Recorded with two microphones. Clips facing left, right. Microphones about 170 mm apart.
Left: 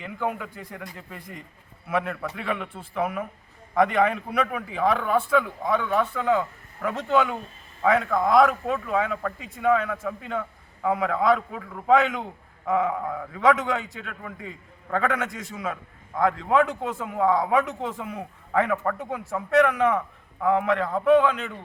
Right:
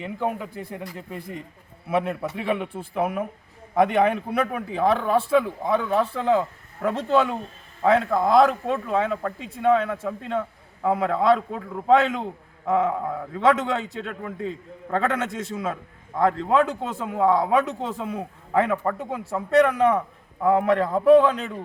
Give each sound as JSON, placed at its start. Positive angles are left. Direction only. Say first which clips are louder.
{"t": 0.0, "sound": "a man's voice", "louder": "right 2 dB", "side_deg": -30}
{"t": 12.6, "sound": "a sound", "louder": "right 2 dB", "side_deg": -25}
{"t": 13.3, "sound": "a man's voice", "louder": "right 1 dB", "side_deg": -25}